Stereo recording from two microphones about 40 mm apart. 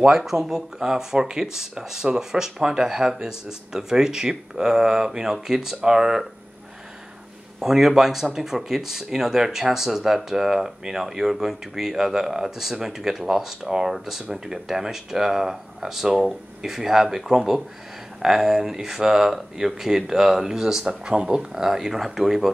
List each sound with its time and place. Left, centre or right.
0.0 s speech: centre
7.6 s speech: centre
21.4 s speech: centre